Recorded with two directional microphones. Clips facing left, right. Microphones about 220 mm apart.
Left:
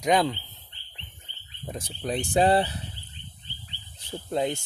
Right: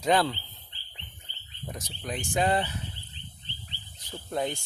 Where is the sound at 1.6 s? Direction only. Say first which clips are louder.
Left 5 dB; 30° left (ahead or behind).